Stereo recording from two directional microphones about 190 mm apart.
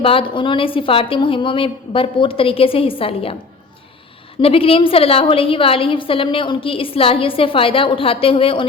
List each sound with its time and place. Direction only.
0.0 s a woman's voice: 30° left (ahead or behind)
4.4 s a woman's voice: 30° left (ahead or behind)